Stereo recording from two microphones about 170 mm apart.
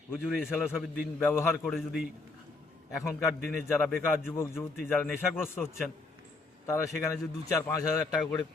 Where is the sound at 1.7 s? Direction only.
Centre (ahead or behind).